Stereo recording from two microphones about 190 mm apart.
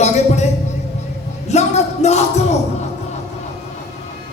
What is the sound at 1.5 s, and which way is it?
Speech, 35° left (ahead or behind).